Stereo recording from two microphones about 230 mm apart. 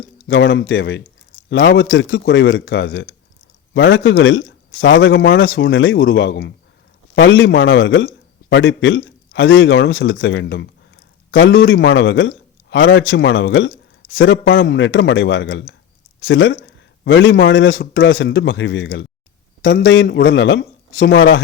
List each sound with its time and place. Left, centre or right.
0.3 s a man's voice: left